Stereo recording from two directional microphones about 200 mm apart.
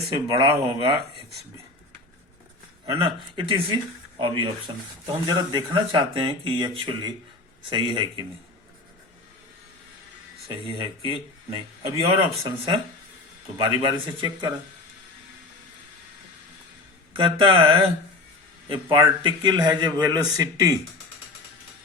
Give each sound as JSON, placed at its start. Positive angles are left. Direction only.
{"t": 0.3, "sound": "speech", "side_deg": -25}
{"t": 2.8, "sound": "speech", "side_deg": -25}
{"t": 10.7, "sound": "speech", "side_deg": -25}
{"t": 17.2, "sound": "speech", "side_deg": -25}